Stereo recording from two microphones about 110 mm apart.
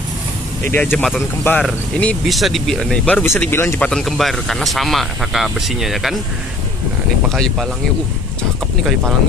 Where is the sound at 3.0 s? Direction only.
15° left (ahead or behind).